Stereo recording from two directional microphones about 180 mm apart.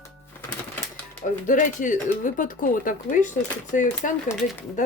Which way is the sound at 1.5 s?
45° left (ahead or behind).